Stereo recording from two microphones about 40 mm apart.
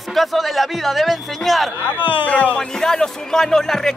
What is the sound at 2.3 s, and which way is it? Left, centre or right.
Speech, left.